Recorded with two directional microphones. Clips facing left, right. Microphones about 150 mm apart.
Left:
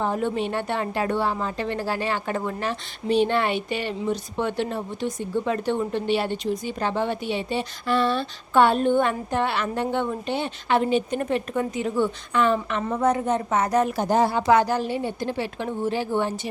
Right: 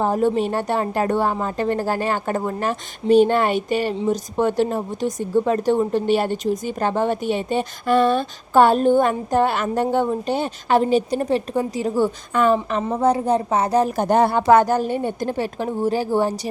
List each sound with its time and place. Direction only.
0.0 s a woman's voice: 40° right (ahead or behind)
12.9 s a woman's voice: 30° right (ahead or behind)
13.9 s a woman's voice: 60° right (ahead or behind); by 16.3 s 40° right (ahead or behind)